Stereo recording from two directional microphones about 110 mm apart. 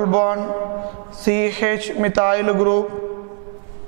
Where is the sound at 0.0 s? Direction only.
10° right (ahead or behind).